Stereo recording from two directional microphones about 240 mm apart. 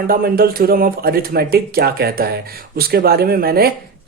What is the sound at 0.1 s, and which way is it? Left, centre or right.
Speech, right.